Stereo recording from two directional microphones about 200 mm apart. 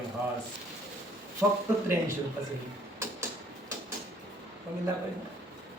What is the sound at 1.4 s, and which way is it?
Speech, 10° right (ahead or behind).